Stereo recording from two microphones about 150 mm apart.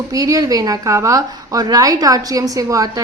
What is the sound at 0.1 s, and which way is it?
A woman's voice, 25° right (ahead or behind).